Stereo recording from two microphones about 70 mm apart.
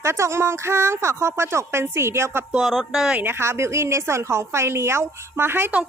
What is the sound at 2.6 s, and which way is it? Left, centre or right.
Speech, centre.